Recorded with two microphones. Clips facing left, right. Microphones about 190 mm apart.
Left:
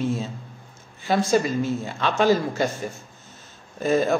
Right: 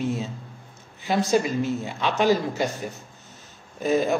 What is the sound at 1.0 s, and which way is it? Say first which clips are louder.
A man's voice: left 1 dB; 10° right (ahead or behind).